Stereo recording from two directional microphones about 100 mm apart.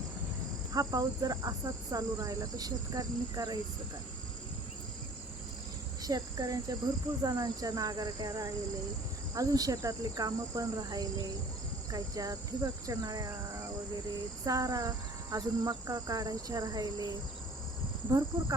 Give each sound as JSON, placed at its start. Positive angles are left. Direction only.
{"t": 0.7, "sound": "cricket", "side_deg": -35}
{"t": 6.0, "sound": "speech", "side_deg": -40}
{"t": 7.2, "sound": "cricket", "side_deg": -40}
{"t": 14.4, "sound": "cricket", "side_deg": -35}
{"t": 18.1, "sound": "cricket", "side_deg": -35}